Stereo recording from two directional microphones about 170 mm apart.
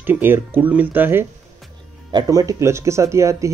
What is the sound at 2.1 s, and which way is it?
Speech, 20° right (ahead or behind).